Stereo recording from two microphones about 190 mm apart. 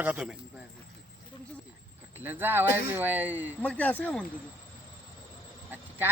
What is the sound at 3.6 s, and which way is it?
Speech, 5° left (ahead or behind).